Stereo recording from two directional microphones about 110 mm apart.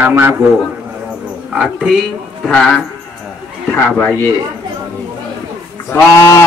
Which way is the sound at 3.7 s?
20° left (ahead or behind).